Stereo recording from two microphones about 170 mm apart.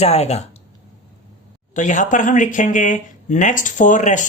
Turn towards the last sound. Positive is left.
turn(degrees=45)  # may be behind; listen again after turning